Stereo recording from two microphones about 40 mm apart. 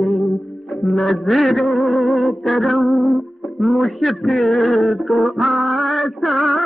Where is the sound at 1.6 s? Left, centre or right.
Centre.